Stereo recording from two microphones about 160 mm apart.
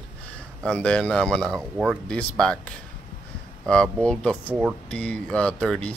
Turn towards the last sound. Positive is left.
turn(degrees=5)  # may be behind; listen again after turning